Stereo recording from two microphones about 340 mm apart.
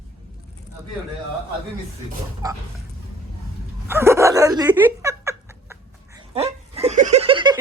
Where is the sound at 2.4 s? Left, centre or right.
Centre.